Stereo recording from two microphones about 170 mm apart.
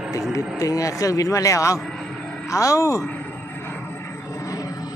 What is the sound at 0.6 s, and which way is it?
A man's voice, 20° left (ahead or behind).